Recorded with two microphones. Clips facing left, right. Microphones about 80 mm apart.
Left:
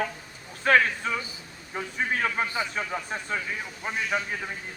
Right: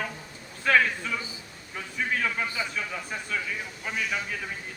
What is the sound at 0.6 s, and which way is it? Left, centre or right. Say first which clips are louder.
A man's voice: left 2 dB; left.